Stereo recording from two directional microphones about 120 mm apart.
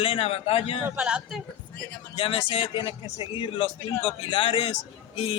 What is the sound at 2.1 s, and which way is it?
A man's voice, 50° left (ahead or behind).